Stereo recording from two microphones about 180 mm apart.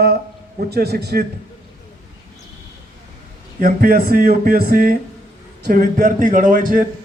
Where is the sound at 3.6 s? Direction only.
55° right (ahead or behind).